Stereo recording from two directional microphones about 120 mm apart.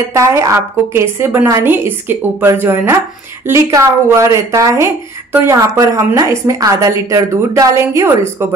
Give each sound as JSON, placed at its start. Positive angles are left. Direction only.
{"t": 0.1, "sound": "a woman's voice", "side_deg": -25}